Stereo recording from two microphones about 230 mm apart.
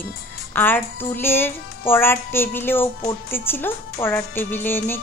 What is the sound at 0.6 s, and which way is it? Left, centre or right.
Speech, centre.